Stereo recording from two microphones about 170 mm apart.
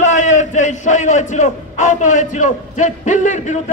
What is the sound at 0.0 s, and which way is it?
A man's voice, 45° left (ahead or behind).